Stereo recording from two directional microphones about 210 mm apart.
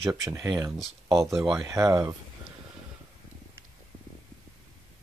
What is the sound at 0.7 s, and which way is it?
Speech, centre (ahead or behind).